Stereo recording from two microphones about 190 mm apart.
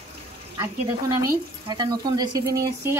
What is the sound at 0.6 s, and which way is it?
Speech, 15° right (ahead or behind).